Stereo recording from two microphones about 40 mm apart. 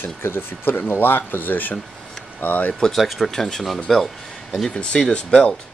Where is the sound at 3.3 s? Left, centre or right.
Centre.